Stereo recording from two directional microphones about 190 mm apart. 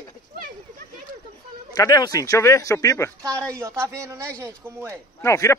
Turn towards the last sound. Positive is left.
turn(degrees=15)  # may be behind; listen again after turning